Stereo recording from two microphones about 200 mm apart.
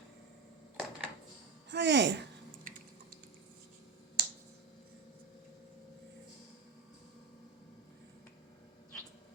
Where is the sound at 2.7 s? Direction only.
45° right (ahead or behind).